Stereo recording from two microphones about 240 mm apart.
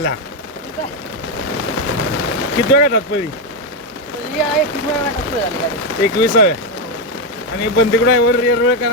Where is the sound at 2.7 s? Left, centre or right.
Left.